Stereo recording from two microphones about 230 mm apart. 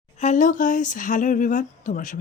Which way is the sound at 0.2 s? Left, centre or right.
Left.